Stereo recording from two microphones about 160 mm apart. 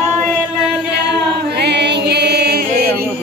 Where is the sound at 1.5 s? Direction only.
90° right.